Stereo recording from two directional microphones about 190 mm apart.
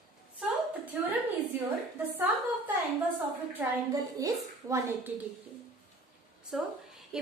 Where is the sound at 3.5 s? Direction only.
20° right (ahead or behind).